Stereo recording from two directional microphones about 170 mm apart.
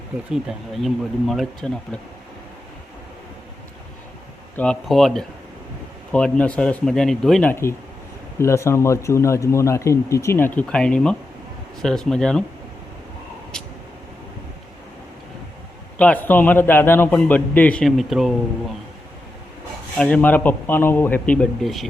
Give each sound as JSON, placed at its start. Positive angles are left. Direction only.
{"t": 0.3, "sound": "speech", "side_deg": 0}
{"t": 4.5, "sound": "speech", "side_deg": 5}
{"t": 7.5, "sound": "speech", "side_deg": 15}
{"t": 13.5, "sound": "vehicle", "side_deg": 5}
{"t": 16.0, "sound": "speech", "side_deg": 10}
{"t": 20.0, "sound": "speech", "side_deg": 5}